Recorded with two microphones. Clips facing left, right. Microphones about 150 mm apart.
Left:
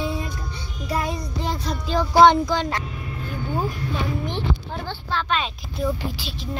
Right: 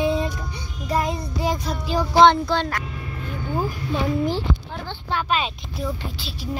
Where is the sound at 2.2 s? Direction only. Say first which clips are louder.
Even; 10° left (ahead or behind).